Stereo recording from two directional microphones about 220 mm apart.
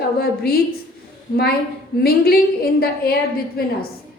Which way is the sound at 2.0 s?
45° left (ahead or behind).